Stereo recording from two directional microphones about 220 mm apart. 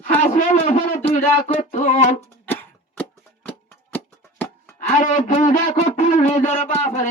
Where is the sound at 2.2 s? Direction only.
10° left (ahead or behind).